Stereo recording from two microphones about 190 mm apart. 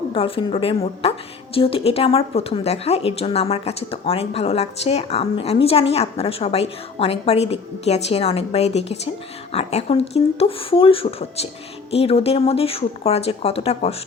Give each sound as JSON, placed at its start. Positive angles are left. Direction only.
{"t": 0.1, "sound": "a woman's voice", "side_deg": 30}